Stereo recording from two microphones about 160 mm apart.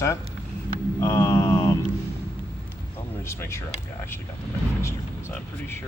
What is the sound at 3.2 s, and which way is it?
Speech, 15° left (ahead or behind).